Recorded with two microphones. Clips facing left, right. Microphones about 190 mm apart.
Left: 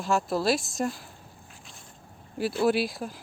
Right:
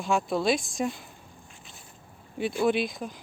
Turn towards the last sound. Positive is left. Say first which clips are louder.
# left 1 dB
turn(degrees=5)  # may be behind; listen again after turning